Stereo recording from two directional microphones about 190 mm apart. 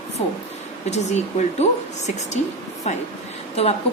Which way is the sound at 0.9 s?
35° left (ahead or behind).